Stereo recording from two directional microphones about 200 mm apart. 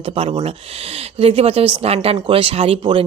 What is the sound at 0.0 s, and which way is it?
Speech, 30° right (ahead or behind).